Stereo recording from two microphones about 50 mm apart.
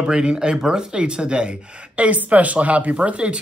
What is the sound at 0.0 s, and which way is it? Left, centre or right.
Speech, centre.